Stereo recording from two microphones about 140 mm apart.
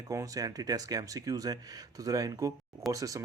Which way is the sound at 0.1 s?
25° right (ahead or behind).